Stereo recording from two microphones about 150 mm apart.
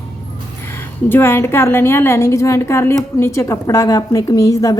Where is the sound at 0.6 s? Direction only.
15° left (ahead or behind).